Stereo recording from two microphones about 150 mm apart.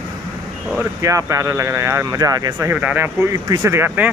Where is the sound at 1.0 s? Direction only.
20° right (ahead or behind).